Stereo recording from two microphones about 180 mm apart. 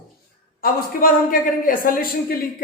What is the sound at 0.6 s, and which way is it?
A man's voice, 50° left (ahead or behind).